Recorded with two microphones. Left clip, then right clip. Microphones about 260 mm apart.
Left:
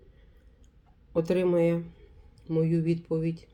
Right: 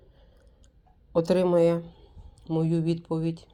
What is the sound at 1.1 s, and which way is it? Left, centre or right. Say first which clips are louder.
Speech: right 3 dB; right.